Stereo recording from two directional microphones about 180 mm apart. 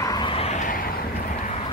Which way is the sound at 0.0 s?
25° left (ahead or behind).